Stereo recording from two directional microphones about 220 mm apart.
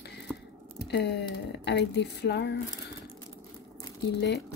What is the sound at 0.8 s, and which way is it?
Speech, 50° left (ahead or behind).